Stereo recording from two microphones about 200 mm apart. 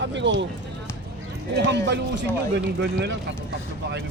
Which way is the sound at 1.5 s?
60° right (ahead or behind).